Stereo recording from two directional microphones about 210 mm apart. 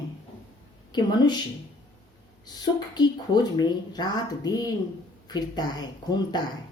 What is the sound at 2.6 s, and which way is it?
Speech, 20° left (ahead or behind).